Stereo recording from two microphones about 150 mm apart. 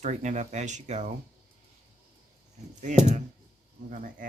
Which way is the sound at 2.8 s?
55° right (ahead or behind).